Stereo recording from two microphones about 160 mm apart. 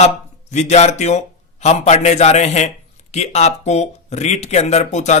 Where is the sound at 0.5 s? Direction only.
45° left (ahead or behind).